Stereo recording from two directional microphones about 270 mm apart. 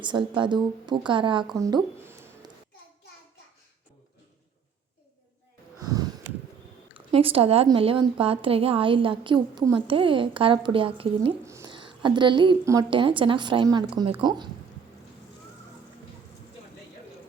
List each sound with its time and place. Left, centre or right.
0.0 s speech: centre
5.8 s snort: centre
6.9 s a woman's voice: right